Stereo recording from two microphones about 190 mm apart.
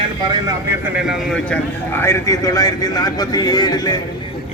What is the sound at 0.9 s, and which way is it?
A man's voice, centre (ahead or behind).